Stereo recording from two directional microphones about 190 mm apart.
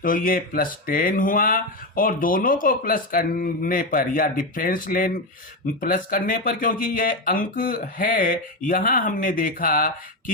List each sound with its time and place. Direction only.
0.0 s speech: 50° left (ahead or behind)